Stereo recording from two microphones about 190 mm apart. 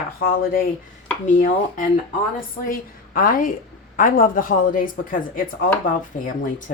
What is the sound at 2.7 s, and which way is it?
A woman's voice, 50° left (ahead or behind).